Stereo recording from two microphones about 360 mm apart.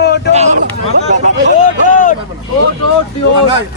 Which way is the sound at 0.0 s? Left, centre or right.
Left.